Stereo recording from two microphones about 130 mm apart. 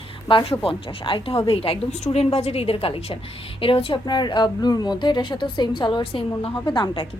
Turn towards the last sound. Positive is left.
turn(degrees=40)  # may be behind; listen again after turning